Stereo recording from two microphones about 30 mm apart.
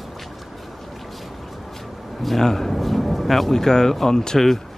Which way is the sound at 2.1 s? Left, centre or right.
Centre.